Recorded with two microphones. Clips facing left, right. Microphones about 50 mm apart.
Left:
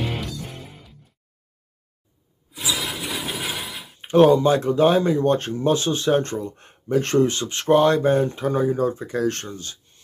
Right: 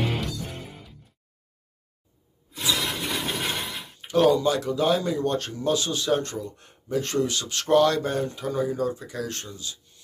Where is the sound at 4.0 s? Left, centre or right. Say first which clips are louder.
Left 5 dB; left.